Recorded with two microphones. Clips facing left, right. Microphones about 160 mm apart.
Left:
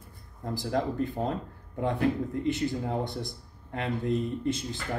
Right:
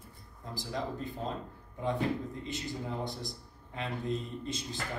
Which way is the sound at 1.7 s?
60° left (ahead or behind).